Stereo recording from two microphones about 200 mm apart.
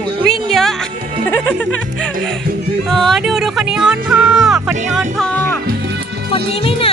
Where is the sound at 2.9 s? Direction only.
Centre (ahead or behind).